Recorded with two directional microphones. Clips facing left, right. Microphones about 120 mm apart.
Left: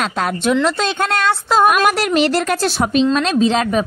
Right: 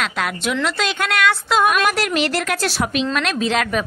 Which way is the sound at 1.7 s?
45° left (ahead or behind).